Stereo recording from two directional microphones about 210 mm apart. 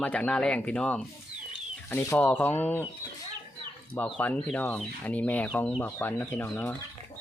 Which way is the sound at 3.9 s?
10° left (ahead or behind).